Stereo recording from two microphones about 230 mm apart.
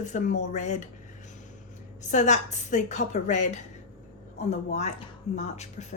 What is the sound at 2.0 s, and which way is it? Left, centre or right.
Speech, left.